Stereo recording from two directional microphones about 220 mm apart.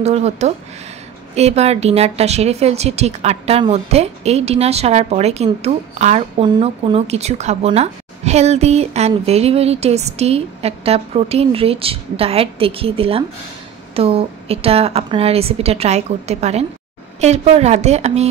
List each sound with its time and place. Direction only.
0.0 s speech: 30° right (ahead or behind)